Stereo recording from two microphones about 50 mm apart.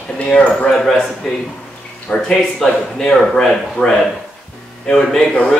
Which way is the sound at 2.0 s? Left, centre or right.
Centre.